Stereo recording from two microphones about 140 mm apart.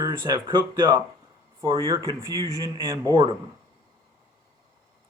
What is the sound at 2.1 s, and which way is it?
Speech, 20° right (ahead or behind).